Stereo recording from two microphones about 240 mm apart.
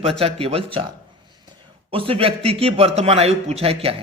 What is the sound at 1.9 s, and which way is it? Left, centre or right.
A man's voice, right.